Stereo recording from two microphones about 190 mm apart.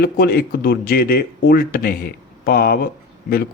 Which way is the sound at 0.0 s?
55° left (ahead or behind).